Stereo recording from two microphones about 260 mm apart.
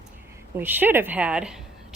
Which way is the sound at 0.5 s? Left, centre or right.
Centre.